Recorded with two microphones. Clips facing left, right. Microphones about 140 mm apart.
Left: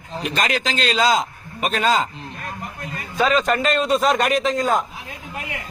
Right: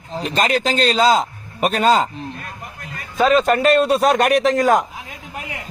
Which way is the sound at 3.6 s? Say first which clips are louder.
Right 4 dB; 60° right (ahead or behind).